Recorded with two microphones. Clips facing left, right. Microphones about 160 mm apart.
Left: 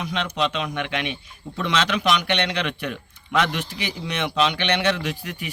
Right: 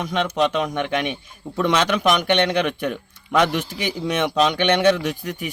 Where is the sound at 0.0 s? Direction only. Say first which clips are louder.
Right 4 dB; 45° right (ahead or behind).